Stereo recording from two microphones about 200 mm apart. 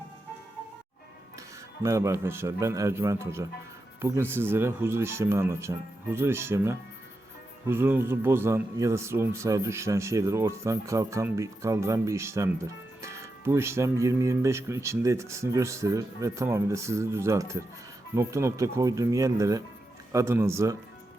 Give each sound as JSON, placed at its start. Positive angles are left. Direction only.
{"t": 1.8, "sound": "speech", "side_deg": -15}